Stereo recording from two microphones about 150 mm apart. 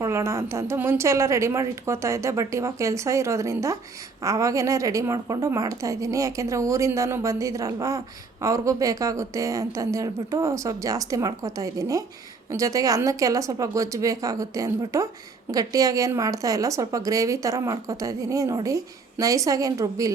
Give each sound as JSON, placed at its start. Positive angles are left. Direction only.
{"t": 0.0, "sound": "a woman's voice", "side_deg": -20}